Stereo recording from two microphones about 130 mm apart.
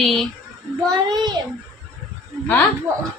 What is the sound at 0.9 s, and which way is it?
Speech, 30° right (ahead or behind).